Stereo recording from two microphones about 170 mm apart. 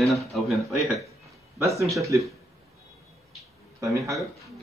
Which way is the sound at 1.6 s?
20° right (ahead or behind).